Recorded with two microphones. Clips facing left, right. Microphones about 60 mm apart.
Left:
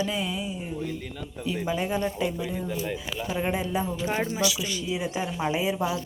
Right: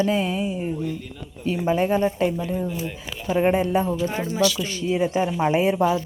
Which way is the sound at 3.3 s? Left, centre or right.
Right.